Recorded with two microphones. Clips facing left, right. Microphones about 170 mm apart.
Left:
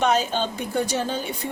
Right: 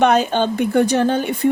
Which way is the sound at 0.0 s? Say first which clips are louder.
Right 6 dB; 60° right (ahead or behind).